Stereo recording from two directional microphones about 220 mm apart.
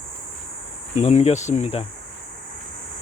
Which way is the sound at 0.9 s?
30° left (ahead or behind).